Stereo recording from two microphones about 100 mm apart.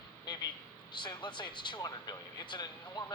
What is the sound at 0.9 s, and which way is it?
Speech, 50° left (ahead or behind).